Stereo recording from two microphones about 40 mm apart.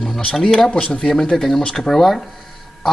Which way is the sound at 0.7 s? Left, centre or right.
Left.